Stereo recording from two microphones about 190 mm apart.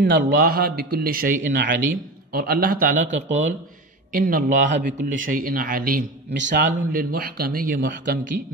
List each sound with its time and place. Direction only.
0.0 s a man's voice: 50° right (ahead or behind)
6.3 s a man's voice: 70° right (ahead or behind)
6.9 s a man's voice: 50° right (ahead or behind)
7.8 s a man's voice: 70° right (ahead or behind)